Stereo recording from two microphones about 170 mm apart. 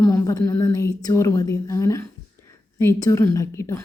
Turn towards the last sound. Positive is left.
turn(degrees=15)  # may be behind; listen again after turning